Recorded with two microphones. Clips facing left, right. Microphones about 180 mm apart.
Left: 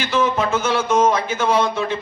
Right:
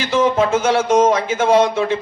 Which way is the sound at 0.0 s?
90° right.